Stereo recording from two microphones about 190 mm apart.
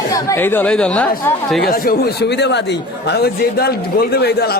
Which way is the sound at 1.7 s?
50° left (ahead or behind).